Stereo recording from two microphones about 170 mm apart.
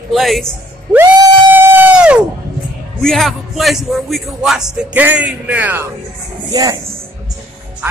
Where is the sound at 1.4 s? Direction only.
10° right (ahead or behind).